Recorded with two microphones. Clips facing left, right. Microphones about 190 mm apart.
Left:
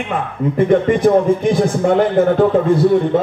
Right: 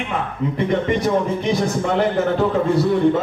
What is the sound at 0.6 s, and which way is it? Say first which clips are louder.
A man's voice: left 7 dB; 50° left (ahead or behind).